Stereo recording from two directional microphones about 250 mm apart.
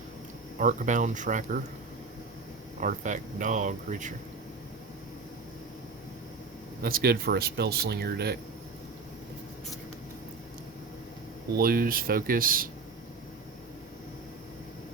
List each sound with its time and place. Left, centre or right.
0.6 s speech: right
2.8 s speech: right
6.8 s speech: right
11.5 s speech: right